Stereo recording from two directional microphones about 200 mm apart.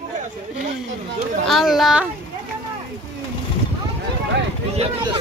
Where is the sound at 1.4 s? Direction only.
Centre (ahead or behind).